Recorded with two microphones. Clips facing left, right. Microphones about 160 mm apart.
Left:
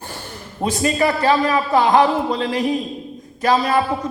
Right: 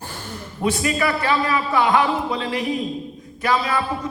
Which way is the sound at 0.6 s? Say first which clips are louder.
Left 3 dB; 40° left (ahead or behind).